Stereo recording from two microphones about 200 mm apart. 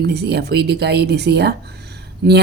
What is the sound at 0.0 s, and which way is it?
Speech, 55° right (ahead or behind).